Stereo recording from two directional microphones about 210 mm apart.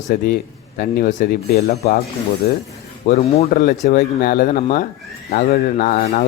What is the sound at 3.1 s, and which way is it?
Speech, 40° left (ahead or behind).